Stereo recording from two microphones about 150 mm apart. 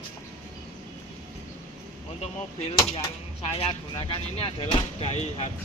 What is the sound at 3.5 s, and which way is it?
Speech, 40° left (ahead or behind).